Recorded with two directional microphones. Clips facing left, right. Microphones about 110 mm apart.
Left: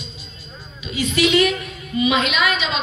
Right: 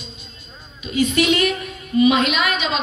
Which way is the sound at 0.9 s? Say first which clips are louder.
Even; 45° right (ahead or behind).